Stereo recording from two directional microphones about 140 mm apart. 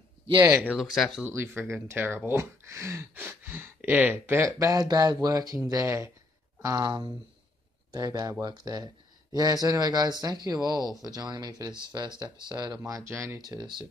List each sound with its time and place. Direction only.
0.5 s speech: 20° right (ahead or behind)
0.7 s speech: centre (ahead or behind)
1.2 s speech: 15° right (ahead or behind)
13.4 s speech: 30° right (ahead or behind)